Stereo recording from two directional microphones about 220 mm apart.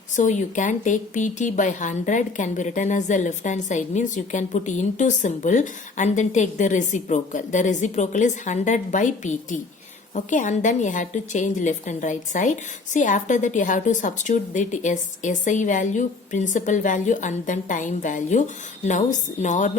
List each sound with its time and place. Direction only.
0.2 s speech: 35° left (ahead or behind)